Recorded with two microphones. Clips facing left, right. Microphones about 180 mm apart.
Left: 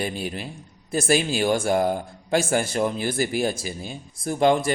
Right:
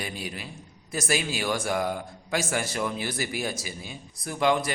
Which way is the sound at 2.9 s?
50° left (ahead or behind).